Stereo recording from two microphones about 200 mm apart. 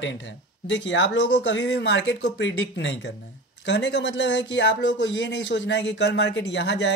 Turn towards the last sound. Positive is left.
turn(degrees=60)  # may be behind; listen again after turning